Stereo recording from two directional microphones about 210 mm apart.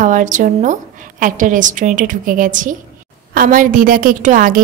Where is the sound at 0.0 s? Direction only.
35° right (ahead or behind).